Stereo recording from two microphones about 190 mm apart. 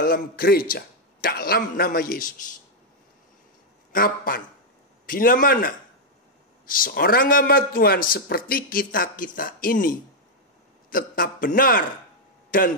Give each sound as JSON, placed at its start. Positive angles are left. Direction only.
{"t": 0.0, "sound": "a man's voice", "side_deg": 50}
{"t": 3.9, "sound": "a man's voice", "side_deg": 50}
{"t": 12.4, "sound": "a sound", "side_deg": 45}